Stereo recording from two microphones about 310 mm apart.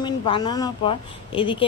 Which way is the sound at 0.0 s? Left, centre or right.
Centre.